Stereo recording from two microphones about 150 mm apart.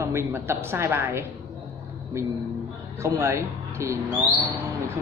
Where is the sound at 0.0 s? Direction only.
15° right (ahead or behind).